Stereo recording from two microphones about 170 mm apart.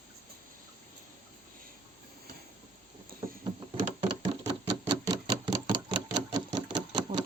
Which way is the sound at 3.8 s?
35° right (ahead or behind).